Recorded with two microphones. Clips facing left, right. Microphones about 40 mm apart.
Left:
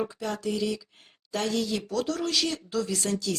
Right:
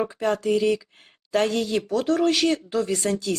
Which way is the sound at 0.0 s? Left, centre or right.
Right.